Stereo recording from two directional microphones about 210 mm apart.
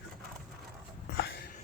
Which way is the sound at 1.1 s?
60° left (ahead or behind).